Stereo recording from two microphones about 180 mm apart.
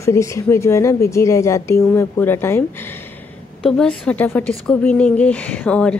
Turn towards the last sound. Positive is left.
turn(degrees=5)  # may be behind; listen again after turning